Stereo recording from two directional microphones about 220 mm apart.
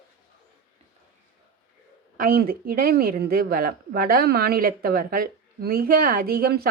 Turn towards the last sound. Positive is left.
turn(degrees=-40)  # may be behind; listen again after turning